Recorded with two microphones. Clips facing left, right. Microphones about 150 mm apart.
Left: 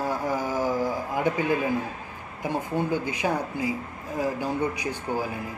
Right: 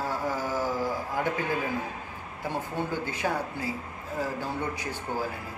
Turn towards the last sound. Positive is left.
turn(degrees=15)  # may be behind; listen again after turning